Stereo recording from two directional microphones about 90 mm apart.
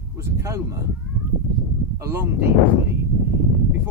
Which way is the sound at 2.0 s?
30° right (ahead or behind).